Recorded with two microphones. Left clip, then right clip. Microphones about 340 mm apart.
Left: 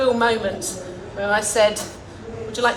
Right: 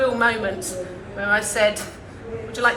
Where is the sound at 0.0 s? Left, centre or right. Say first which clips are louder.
Left 1 dB; left.